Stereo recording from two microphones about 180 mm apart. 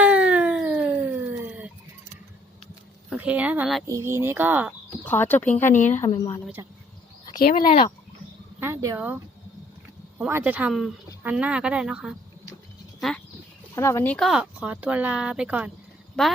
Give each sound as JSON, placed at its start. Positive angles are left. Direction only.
{"t": 0.0, "sound": "a sound", "side_deg": -5}
{"t": 3.1, "sound": "a woman's voice", "side_deg": -5}
{"t": 3.8, "sound": "speech", "side_deg": -15}
{"t": 5.0, "sound": "speech", "side_deg": 10}
{"t": 5.7, "sound": "a woman's voice", "side_deg": 45}
{"t": 7.3, "sound": "speech", "side_deg": 55}
{"t": 7.6, "sound": "speech", "side_deg": 35}
{"t": 8.6, "sound": "speech", "side_deg": -15}
{"t": 13.7, "sound": "speech", "side_deg": 15}